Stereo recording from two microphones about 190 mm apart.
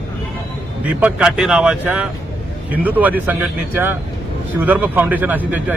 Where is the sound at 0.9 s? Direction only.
5° right (ahead or behind).